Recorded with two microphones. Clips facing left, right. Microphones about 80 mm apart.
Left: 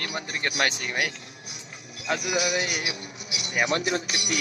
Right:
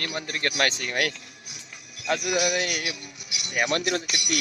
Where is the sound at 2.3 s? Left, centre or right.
Centre.